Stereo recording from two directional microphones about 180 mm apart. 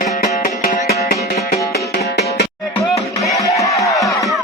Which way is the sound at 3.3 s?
20° left (ahead or behind).